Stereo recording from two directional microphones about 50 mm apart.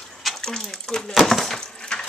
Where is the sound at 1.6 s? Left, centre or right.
Centre.